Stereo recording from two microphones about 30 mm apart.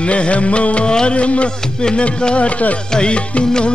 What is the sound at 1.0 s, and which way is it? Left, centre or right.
Speech, left.